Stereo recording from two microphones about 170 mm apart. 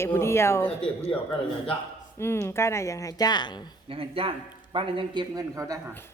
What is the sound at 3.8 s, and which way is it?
A man's voice, 35° right (ahead or behind).